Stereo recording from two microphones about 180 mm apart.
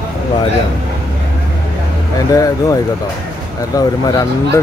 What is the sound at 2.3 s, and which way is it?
Speech, 20° left (ahead or behind).